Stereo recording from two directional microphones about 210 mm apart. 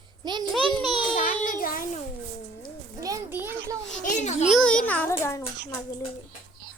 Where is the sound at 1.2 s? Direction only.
40° left (ahead or behind).